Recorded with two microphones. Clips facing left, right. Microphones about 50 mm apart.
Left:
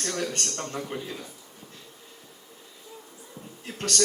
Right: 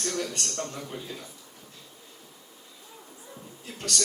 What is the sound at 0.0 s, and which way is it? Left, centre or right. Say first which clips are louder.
Speech: left 1 dB; left.